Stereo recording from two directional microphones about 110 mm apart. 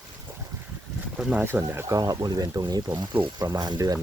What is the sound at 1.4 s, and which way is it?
Speech, 20° right (ahead or behind).